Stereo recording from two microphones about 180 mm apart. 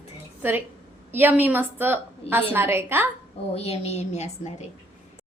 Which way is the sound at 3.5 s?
35° left (ahead or behind).